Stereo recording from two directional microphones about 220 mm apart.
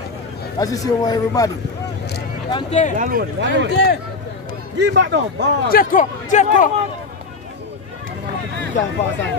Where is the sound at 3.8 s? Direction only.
50° left (ahead or behind).